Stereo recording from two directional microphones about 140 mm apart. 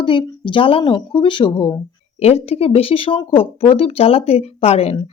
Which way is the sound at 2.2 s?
45° left (ahead or behind).